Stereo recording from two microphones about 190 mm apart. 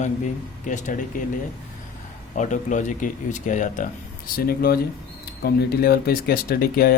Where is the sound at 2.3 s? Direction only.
40° left (ahead or behind).